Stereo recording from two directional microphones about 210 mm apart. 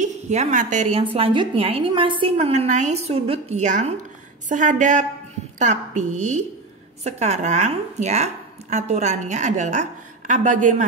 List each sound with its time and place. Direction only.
0.0 s a woman's voice: 35° right (ahead or behind)